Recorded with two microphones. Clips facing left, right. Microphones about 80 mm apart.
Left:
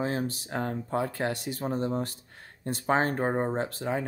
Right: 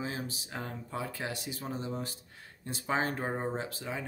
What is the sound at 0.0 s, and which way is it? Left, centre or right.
Speech, left.